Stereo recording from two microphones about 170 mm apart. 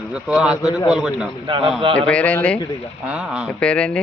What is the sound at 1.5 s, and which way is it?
Speech, 30° right (ahead or behind).